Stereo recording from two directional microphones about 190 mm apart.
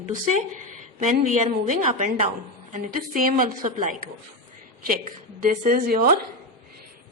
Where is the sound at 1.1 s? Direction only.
40° right (ahead or behind).